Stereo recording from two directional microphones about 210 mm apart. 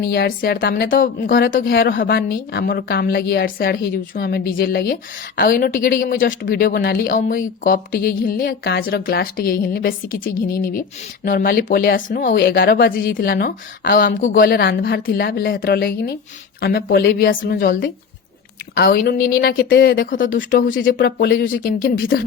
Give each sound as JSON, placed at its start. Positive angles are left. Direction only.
{"t": 0.0, "sound": "speech", "side_deg": 45}